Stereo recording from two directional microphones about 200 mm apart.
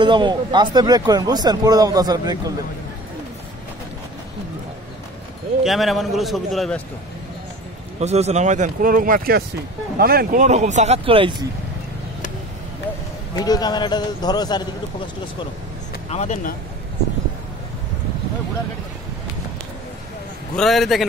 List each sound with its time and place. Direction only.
0.0 s speech: 25° right (ahead or behind)
5.6 s a man's voice: centre (ahead or behind)
8.0 s speech: 35° right (ahead or behind)
13.3 s a man's voice: 20° left (ahead or behind)
16.1 s speech: 35° left (ahead or behind)
20.5 s a man's voice: centre (ahead or behind)